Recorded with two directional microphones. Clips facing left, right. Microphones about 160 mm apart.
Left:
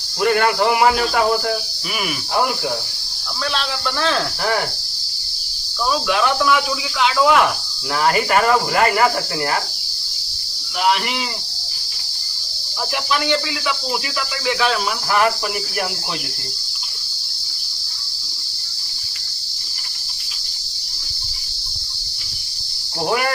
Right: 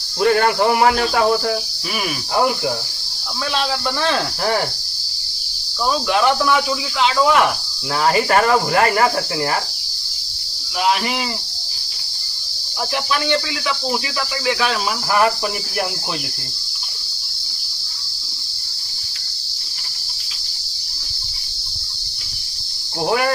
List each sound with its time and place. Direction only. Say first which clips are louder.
0.2 s speech: right 1 dB; 35° right (ahead or behind)
0.9 s speech: even; 5° left (ahead or behind)